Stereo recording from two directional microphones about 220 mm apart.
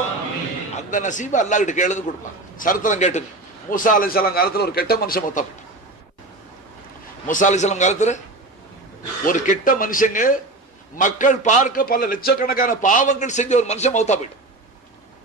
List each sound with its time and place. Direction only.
0.8 s a man's voice: 35° left (ahead or behind)
7.2 s a man's voice: 35° left (ahead or behind)
9.2 s a man's voice: 35° left (ahead or behind)